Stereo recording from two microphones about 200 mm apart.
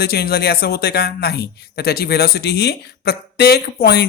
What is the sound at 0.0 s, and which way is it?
A man's voice, 50° left (ahead or behind).